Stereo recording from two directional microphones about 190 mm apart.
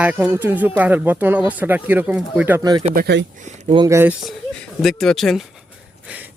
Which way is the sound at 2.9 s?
55° right (ahead or behind).